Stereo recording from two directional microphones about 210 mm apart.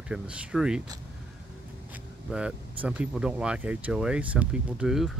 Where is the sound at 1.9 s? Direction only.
5° right (ahead or behind).